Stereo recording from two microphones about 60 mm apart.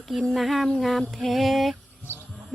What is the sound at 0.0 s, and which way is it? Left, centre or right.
Speech, centre.